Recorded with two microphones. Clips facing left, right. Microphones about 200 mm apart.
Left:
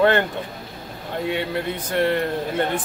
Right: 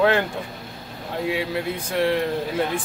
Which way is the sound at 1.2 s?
Centre (ahead or behind).